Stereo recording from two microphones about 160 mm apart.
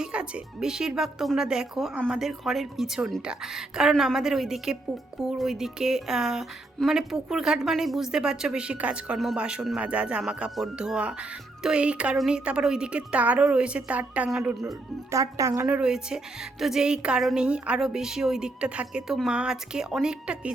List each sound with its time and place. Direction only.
0.0 s a woman's voice: 5° right (ahead or behind)
15.1 s speech: 20° right (ahead or behind)
15.6 s speech: 5° right (ahead or behind)